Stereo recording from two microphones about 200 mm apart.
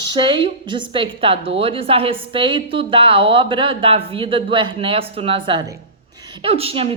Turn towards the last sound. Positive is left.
turn(degrees=-30)  # may be behind; listen again after turning